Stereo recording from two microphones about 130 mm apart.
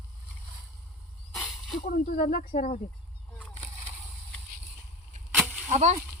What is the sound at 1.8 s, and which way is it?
Speech, 90° left.